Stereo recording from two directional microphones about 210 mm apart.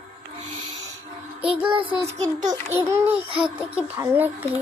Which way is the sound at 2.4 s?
20° right (ahead or behind).